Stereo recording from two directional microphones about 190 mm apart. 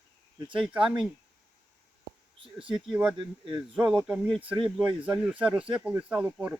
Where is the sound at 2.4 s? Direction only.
25° right (ahead or behind).